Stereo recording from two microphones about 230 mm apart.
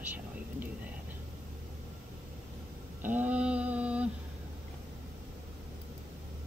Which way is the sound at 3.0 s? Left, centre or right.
Centre.